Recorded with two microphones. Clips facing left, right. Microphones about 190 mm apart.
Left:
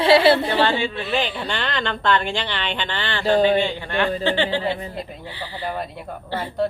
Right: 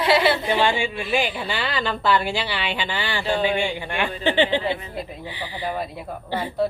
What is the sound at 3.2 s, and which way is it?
Speech, 40° left (ahead or behind).